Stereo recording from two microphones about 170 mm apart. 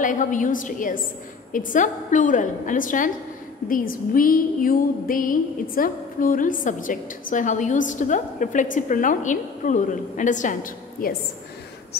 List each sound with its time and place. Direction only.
0.0 s music: 50° left (ahead or behind)